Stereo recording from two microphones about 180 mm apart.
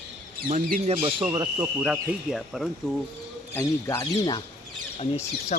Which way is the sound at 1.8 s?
5° right (ahead or behind).